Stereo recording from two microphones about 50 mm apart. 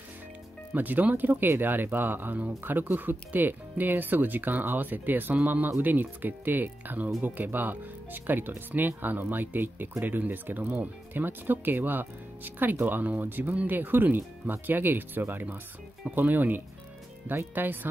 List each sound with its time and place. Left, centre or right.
0.7 s speech: right